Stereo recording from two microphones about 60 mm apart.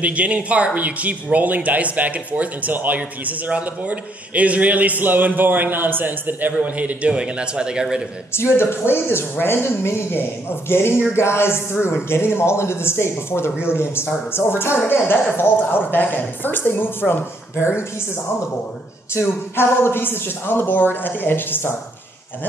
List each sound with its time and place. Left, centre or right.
0.0 s speech: right
8.3 s speech: left
19.1 s speech: left